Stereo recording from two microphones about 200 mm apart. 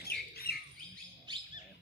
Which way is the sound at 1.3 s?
20° right (ahead or behind).